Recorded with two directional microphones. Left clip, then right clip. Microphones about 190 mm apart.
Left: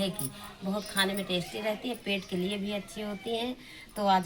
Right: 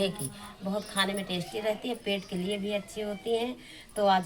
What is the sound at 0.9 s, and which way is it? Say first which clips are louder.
Speech: left 2 dB; 5° right (ahead or behind).